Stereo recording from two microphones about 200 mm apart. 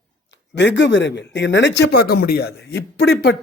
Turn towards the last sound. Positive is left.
turn(degrees=55)  # may be behind; listen again after turning